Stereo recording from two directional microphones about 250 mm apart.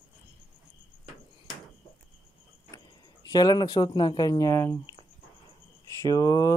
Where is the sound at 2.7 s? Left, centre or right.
Centre.